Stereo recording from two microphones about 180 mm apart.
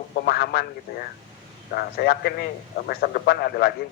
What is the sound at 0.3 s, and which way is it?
A man's voice, 60° left (ahead or behind).